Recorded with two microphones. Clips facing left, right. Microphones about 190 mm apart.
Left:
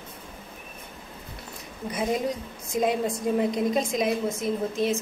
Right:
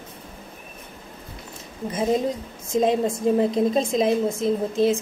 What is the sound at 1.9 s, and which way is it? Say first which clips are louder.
A woman's voice: right 4 dB; 25° right (ahead or behind).